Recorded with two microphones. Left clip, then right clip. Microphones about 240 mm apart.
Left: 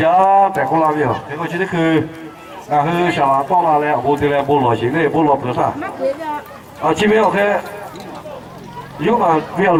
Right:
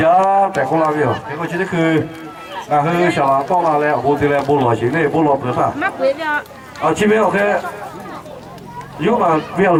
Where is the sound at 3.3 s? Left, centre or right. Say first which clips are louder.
Left 1 dB; centre.